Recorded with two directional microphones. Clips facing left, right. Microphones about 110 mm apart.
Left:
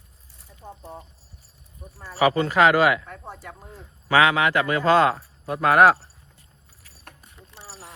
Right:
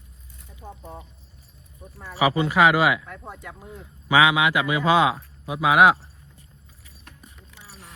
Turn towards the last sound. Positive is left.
turn(degrees=50)  # may be behind; listen again after turning